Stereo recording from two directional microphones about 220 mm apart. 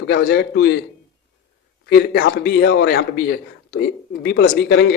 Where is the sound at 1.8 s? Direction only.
45° left (ahead or behind).